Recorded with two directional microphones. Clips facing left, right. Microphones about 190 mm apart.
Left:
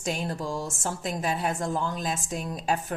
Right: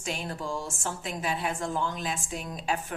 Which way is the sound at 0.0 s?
40° left (ahead or behind).